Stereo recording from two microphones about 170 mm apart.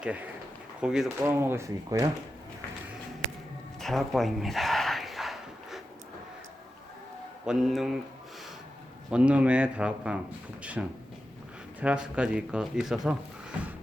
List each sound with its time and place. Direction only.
0.0 s speech: 10° right (ahead or behind)
3.8 s a sound: centre (ahead or behind)
7.4 s speech: centre (ahead or behind)
9.0 s speech: 5° right (ahead or behind)